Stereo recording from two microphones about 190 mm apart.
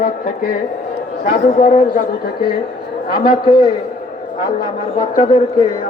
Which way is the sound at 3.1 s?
50° left (ahead or behind).